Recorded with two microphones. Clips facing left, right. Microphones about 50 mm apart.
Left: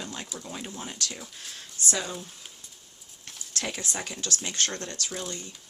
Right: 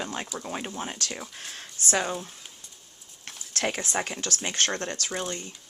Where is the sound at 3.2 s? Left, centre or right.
Right.